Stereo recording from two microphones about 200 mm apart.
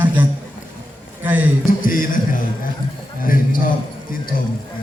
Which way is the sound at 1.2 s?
10° right (ahead or behind).